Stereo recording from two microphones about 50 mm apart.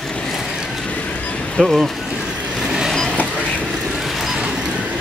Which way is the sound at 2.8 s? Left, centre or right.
Centre.